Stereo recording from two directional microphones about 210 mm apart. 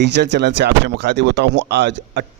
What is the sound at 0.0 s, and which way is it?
A man's voice, 55° right (ahead or behind).